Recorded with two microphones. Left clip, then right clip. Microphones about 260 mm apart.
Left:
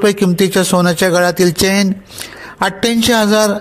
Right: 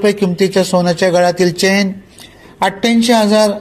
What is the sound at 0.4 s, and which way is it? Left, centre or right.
Speech, left.